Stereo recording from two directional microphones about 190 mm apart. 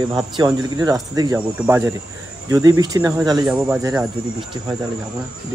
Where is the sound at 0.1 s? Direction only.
20° right (ahead or behind).